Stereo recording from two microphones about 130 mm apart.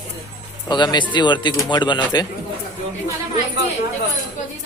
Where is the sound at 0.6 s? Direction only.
35° left (ahead or behind).